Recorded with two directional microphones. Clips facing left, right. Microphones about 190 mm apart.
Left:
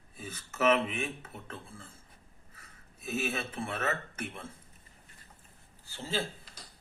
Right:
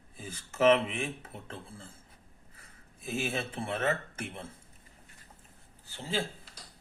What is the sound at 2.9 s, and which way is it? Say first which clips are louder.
Speech: even; 30° right (ahead or behind).